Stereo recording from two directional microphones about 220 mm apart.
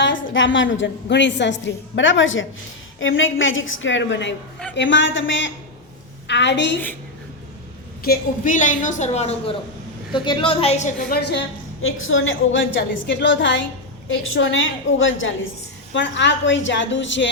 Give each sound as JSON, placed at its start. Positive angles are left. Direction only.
{"t": 0.0, "sound": "a woman's voice", "side_deg": 55}
{"t": 8.0, "sound": "a woman's voice", "side_deg": 40}
{"t": 11.0, "sound": "a woman's voice", "side_deg": 50}